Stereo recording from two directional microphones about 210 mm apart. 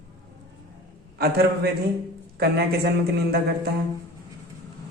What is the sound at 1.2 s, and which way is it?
A man's voice, 50° right (ahead or behind).